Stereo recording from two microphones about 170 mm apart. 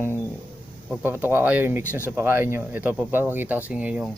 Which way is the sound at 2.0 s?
15° right (ahead or behind).